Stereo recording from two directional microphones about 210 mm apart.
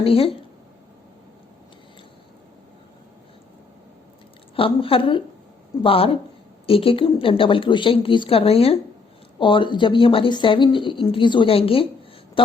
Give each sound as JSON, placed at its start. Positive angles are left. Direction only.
{"t": 0.0, "sound": "a woman's voice", "side_deg": 25}
{"t": 4.5, "sound": "a woman's voice", "side_deg": 25}